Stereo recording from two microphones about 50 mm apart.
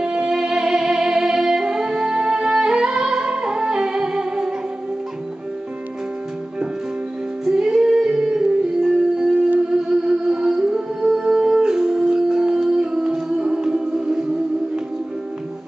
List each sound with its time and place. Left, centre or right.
0.0 s music: centre
7.4 s music: centre